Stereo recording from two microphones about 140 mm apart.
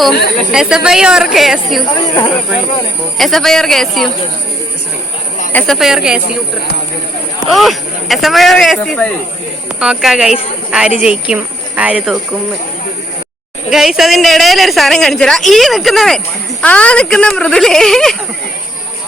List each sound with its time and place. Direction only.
0.0 s a woman's voice: centre (ahead or behind)
2.0 s speech: 35° left (ahead or behind)
3.2 s a woman's voice: centre (ahead or behind)
5.5 s speech: 10° left (ahead or behind)
5.7 s a woman's voice: centre (ahead or behind)
7.5 s a woman's voice: centre (ahead or behind)
13.7 s a woman's voice: 5° right (ahead or behind)